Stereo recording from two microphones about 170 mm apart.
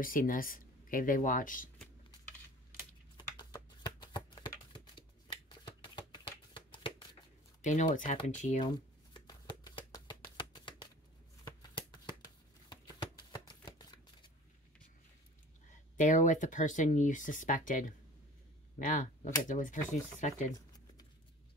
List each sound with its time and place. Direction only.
0.0 s speech: 55° left (ahead or behind)
3.2 s a sound: 25° left (ahead or behind)
6.5 s shuffling cards: 30° left (ahead or behind)
7.6 s speech: 50° left (ahead or behind)
8.6 s shuffling cards: 25° left (ahead or behind)
15.7 s speech: 45° left (ahead or behind)
20.5 s a sound: 20° left (ahead or behind)